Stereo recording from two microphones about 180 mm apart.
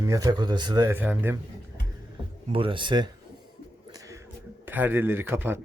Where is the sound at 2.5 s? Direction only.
30° right (ahead or behind).